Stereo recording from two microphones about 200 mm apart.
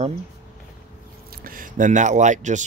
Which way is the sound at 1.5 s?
40° right (ahead or behind).